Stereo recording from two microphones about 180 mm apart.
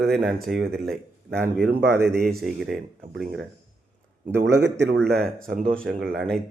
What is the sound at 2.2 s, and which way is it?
Speech, centre (ahead or behind).